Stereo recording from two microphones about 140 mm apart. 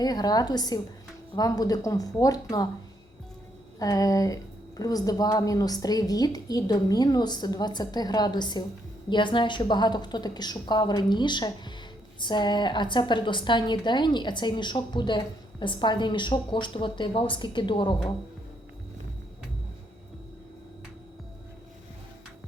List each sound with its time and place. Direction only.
0.0 s a woman's voice: 30° left (ahead or behind)
3.8 s a woman's voice: 25° left (ahead or behind)